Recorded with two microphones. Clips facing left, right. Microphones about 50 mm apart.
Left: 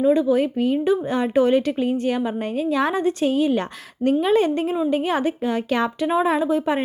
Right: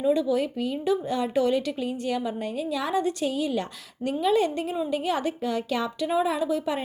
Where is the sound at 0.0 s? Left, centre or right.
Left.